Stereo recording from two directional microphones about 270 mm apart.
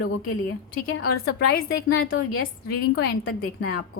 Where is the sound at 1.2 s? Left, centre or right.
Left.